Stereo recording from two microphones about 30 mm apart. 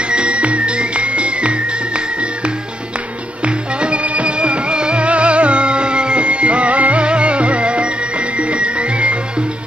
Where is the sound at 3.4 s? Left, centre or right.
Right.